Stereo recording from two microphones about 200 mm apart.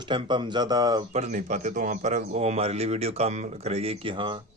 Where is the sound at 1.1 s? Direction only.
35° right (ahead or behind).